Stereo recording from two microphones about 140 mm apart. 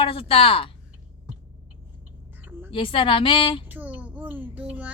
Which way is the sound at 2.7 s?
40° left (ahead or behind).